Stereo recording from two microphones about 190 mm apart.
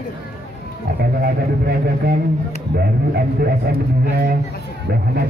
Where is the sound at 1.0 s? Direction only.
55° right (ahead or behind).